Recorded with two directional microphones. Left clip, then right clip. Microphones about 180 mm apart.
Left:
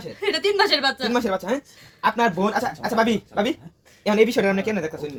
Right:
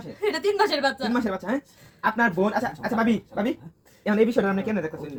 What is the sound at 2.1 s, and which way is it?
A woman's voice, 30° left (ahead or behind).